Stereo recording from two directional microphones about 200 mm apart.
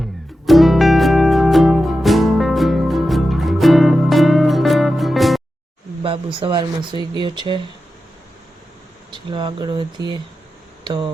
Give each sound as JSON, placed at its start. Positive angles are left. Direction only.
{"t": 0.4, "sound": "music", "side_deg": 0}
{"t": 6.0, "sound": "speech", "side_deg": -25}
{"t": 9.1, "sound": "speech", "side_deg": -25}